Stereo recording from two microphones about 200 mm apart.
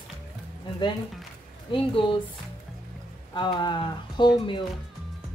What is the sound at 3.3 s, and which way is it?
Speech, 25° left (ahead or behind).